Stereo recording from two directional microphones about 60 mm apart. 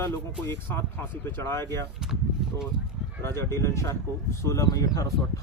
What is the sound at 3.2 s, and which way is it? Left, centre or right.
Speech, left.